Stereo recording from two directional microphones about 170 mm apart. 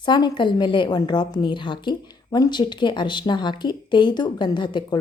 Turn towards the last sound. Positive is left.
turn(degrees=25)  # may be behind; listen again after turning